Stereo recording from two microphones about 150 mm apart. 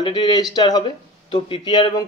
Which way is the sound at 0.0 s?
30° left (ahead or behind).